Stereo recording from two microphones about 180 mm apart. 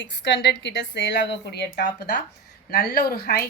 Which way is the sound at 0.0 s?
90° left.